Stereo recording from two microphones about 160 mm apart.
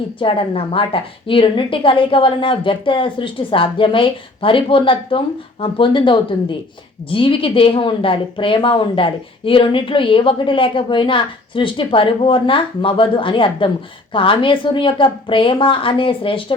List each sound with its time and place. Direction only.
0.2 s a woman's voice: 30° left (ahead or behind)